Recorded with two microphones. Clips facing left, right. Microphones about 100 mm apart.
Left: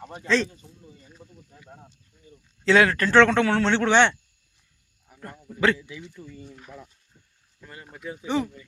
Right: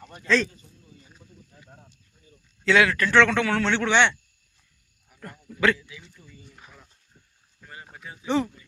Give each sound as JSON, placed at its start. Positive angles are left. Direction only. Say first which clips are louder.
{"t": 0.0, "sound": "speech", "louder": "even", "side_deg": 20}
{"t": 1.2, "sound": "wild animals", "louder": "left 4 dB", "side_deg": 30}
{"t": 2.6, "sound": "speech", "louder": "left 2 dB", "side_deg": 35}
{"t": 5.0, "sound": "a sound", "louder": "left 1 dB", "side_deg": 30}
{"t": 6.1, "sound": "speech", "louder": "left 9 dB", "side_deg": 50}